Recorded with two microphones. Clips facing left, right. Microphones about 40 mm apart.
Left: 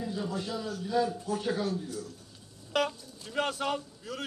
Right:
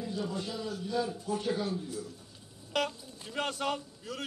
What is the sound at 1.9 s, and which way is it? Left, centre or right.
Speech, centre.